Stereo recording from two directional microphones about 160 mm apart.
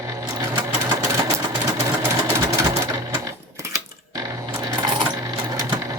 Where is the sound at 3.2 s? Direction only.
20° right (ahead or behind).